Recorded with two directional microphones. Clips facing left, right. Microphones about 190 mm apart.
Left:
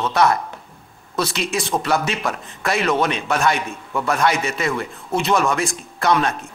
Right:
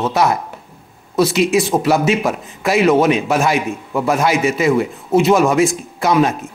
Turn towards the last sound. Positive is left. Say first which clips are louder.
# right 4 dB
turn(degrees=-5)  # may be behind; listen again after turning